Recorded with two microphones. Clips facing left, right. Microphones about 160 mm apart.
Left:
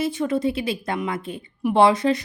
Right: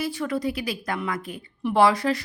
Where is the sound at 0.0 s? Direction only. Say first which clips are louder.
Left 4 dB; 20° left (ahead or behind).